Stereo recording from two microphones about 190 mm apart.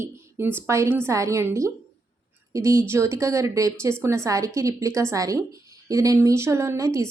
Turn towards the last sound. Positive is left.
turn(degrees=-15)  # may be behind; listen again after turning